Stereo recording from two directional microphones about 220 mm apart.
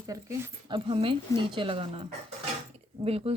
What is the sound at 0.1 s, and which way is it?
A woman's voice, 15° right (ahead or behind).